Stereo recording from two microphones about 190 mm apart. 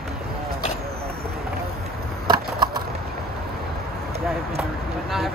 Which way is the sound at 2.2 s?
20° right (ahead or behind).